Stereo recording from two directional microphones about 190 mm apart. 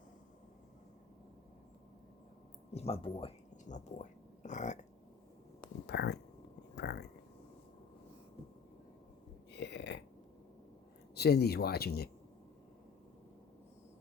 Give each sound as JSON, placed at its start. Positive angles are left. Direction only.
{"t": 2.7, "sound": "speech", "side_deg": 30}
{"t": 5.8, "sound": "speech", "side_deg": 65}
{"t": 9.5, "sound": "burping", "side_deg": 65}
{"t": 11.1, "sound": "speech", "side_deg": 60}